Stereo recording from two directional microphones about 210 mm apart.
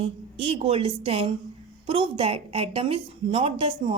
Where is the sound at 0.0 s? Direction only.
30° right (ahead or behind).